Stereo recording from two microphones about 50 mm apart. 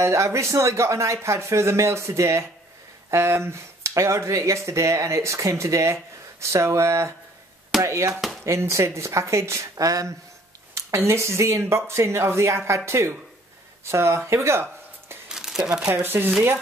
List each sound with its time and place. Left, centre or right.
0.0 s speech: right
3.1 s speech: right
6.4 s speech: right
7.8 s speech: right
8.5 s speech: right
15.3 s crumpling: centre
15.6 s speech: centre
16.0 s speech: right